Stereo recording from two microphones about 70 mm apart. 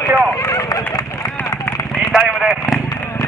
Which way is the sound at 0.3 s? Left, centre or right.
Left.